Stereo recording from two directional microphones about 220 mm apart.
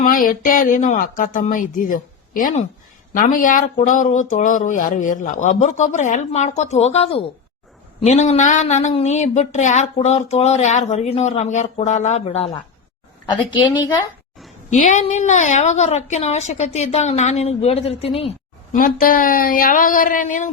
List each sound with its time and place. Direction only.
0.0 s a woman's voice: 40° left (ahead or behind)
14.7 s speech: 35° left (ahead or behind)
18.8 s speech: 40° left (ahead or behind)